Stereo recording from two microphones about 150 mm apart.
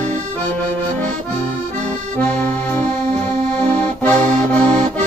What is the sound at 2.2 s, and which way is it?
Accordion, 10° left (ahead or behind).